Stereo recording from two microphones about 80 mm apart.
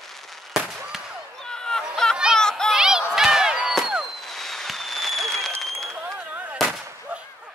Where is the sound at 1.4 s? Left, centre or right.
Centre.